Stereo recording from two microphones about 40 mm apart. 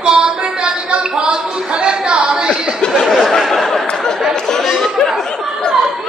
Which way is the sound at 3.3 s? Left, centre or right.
Centre.